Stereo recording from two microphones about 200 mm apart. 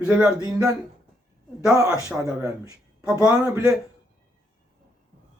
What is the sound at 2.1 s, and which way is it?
Speech, 5° right (ahead or behind).